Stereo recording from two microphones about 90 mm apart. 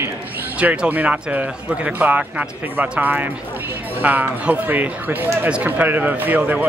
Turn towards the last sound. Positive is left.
turn(degrees=-20)  # may be behind; listen again after turning